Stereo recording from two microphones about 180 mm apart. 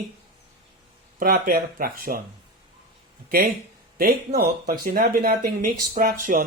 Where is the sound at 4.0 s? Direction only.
55° right (ahead or behind).